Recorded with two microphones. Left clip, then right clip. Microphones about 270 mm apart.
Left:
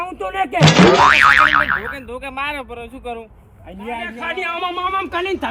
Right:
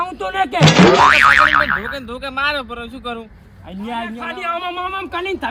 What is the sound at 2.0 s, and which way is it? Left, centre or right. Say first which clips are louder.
Speech: right 4 dB; right.